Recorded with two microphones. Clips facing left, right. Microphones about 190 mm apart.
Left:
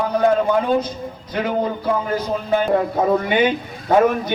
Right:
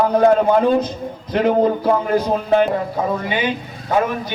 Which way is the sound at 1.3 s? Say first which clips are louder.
Right 6 dB; 45° right (ahead or behind).